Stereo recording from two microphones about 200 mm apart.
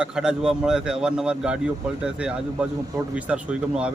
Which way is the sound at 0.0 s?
5° right (ahead or behind).